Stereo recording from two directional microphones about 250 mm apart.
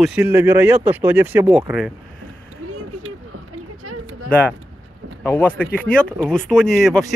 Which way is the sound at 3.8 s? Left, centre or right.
Right.